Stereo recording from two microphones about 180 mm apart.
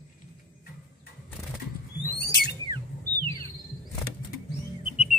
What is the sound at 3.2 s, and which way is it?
Music, 25° right (ahead or behind).